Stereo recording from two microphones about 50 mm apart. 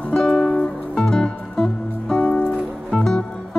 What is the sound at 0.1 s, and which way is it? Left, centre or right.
Music, centre.